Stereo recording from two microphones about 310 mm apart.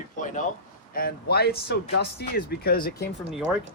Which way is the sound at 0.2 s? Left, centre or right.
Left.